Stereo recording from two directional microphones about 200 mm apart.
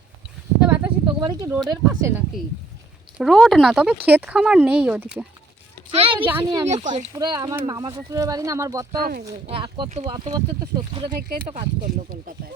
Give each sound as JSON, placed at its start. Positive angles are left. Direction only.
{"t": 0.6, "sound": "a sound", "side_deg": -5}
{"t": 1.2, "sound": "speech", "side_deg": -20}
{"t": 3.2, "sound": "speech", "side_deg": 0}
{"t": 5.9, "sound": "speech", "side_deg": -30}
{"t": 6.2, "sound": "speech", "side_deg": -15}
{"t": 9.0, "sound": "speech", "side_deg": -50}
{"t": 9.5, "sound": "speech", "side_deg": -25}
{"t": 11.5, "sound": "speech", "side_deg": -45}